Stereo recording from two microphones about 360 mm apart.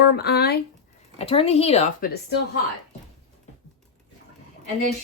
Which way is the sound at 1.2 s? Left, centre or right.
Centre.